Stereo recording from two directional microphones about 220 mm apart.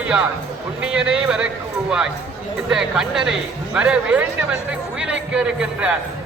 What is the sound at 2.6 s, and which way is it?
A man's voice, centre (ahead or behind).